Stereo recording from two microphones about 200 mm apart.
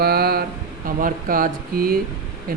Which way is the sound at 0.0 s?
50° right (ahead or behind).